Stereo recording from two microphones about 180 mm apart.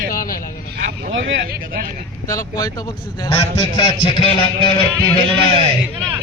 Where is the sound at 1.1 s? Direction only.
85° right.